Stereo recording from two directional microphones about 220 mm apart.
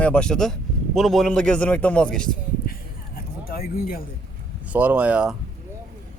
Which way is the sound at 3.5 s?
45° left (ahead or behind).